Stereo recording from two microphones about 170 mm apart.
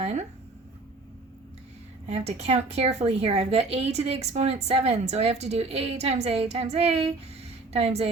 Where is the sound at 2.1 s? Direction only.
40° right (ahead or behind).